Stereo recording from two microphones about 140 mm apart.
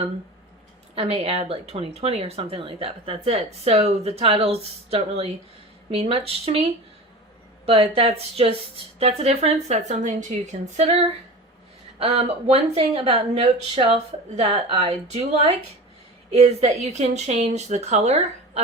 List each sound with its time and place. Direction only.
0.9 s speech: 45° right (ahead or behind)